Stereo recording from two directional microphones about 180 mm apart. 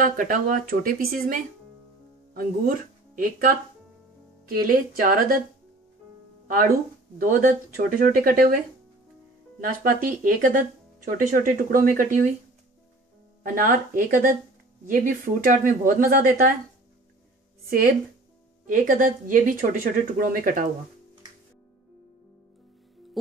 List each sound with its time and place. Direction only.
0.0 s speech: 50° right (ahead or behind)
3.2 s speech: 50° right (ahead or behind)
6.4 s speech: 55° right (ahead or behind)
9.6 s speech: 50° right (ahead or behind)
13.4 s speech: 45° right (ahead or behind)
17.6 s speech: 55° right (ahead or behind)